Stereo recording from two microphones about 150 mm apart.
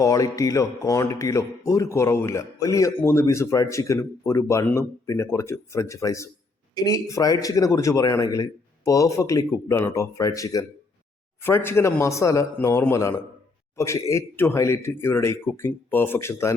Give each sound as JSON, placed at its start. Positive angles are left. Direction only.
{"t": 0.0, "sound": "speech", "side_deg": 20}